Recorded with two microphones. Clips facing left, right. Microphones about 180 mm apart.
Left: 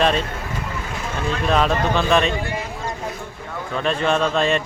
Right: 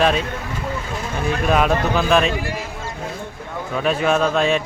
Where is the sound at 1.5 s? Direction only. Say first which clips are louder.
Right 1 dB; 5° right (ahead or behind).